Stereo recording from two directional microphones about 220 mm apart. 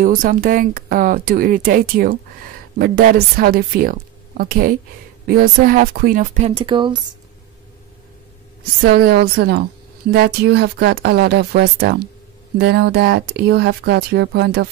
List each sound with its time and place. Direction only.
0.0 s speech: 40° right (ahead or behind); by 7.1 s 20° right (ahead or behind)
8.8 s speech: 45° right (ahead or behind)